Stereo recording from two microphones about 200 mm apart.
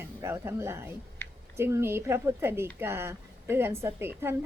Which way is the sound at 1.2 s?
10° left (ahead or behind).